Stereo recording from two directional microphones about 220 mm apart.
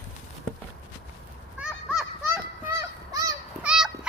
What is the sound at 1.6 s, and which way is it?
Children playing, 5° right (ahead or behind).